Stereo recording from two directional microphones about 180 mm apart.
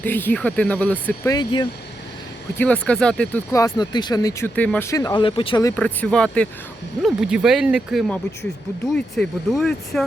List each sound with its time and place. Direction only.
0.0 s speech: 10° left (ahead or behind)
1.3 s speech: 25° left (ahead or behind)
2.8 s speech: 5° left (ahead or behind)
3.5 s speech: 20° left (ahead or behind)
5.6 s speech: 10° left (ahead or behind)